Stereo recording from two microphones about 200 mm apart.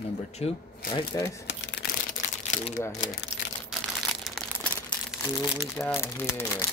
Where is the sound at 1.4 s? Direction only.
60° left (ahead or behind); by 2.6 s 45° left (ahead or behind).